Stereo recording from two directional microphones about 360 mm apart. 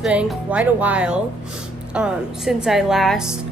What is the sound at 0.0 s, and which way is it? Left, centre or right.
Speech, centre.